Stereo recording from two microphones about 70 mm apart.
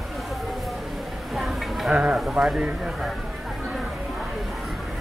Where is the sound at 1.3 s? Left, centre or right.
Centre.